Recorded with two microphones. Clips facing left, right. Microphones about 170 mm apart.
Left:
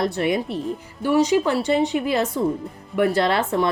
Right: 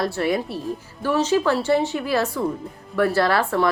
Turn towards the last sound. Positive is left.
turn(degrees=20)  # may be behind; listen again after turning